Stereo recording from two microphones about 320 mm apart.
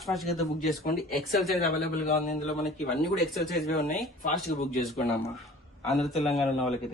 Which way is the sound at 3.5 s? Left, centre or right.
Left.